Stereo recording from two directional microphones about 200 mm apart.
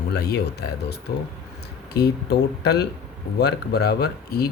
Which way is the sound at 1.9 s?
55° left (ahead or behind).